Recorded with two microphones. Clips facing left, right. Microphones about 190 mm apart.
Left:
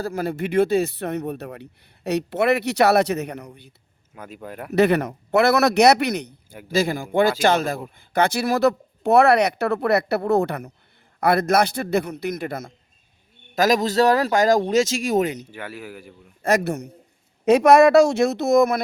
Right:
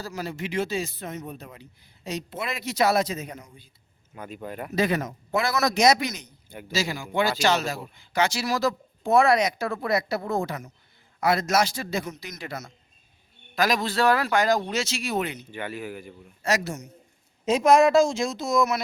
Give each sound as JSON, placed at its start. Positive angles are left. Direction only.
{"t": 0.0, "sound": "a man's voice", "side_deg": 55}
{"t": 4.1, "sound": "a man's voice", "side_deg": 5}
{"t": 4.7, "sound": "a man's voice", "side_deg": 65}
{"t": 13.6, "sound": "speech", "side_deg": 40}
{"t": 15.5, "sound": "a man's voice", "side_deg": 5}
{"t": 16.4, "sound": "a man's voice", "side_deg": 55}